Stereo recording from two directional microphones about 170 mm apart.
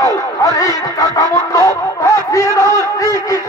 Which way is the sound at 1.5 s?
20° left (ahead or behind).